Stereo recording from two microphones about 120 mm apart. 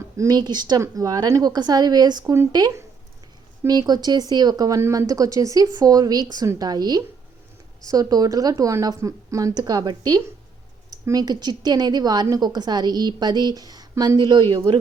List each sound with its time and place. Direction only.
0.2 s speech: 35° right (ahead or behind)